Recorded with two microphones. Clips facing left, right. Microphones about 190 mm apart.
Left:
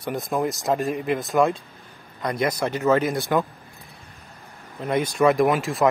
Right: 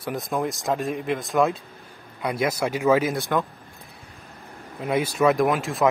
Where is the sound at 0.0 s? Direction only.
Centre (ahead or behind).